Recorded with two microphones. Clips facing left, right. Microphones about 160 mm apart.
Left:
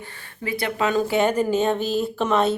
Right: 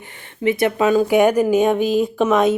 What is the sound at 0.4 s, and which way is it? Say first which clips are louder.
Speech: right 7 dB; 20° right (ahead or behind).